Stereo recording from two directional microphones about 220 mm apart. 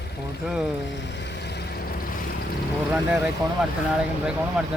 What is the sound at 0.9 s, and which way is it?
Music, 55° left (ahead or behind).